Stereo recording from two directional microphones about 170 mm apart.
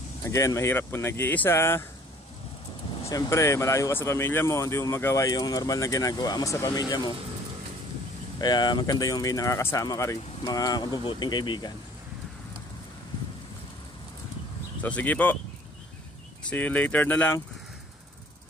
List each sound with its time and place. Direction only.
0.2 s speech: 20° left (ahead or behind)
3.1 s speech: 20° left (ahead or behind)
8.4 s speech: 25° left (ahead or behind)
14.8 s speech: 10° left (ahead or behind)
16.4 s speech: 10° left (ahead or behind)